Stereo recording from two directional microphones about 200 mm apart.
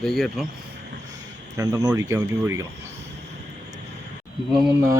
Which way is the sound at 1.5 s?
20° right (ahead or behind).